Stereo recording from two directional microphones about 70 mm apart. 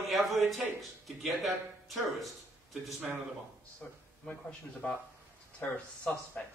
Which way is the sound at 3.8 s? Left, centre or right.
Left.